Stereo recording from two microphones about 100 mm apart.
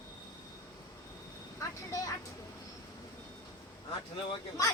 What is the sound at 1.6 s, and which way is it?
Vehicle, 35° left (ahead or behind).